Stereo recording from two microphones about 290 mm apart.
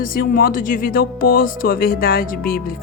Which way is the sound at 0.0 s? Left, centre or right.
Left.